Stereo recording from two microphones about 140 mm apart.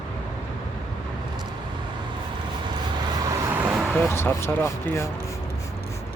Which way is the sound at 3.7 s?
Centre (ahead or behind).